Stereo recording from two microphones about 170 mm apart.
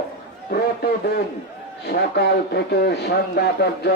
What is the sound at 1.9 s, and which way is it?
Speech, 75° left (ahead or behind).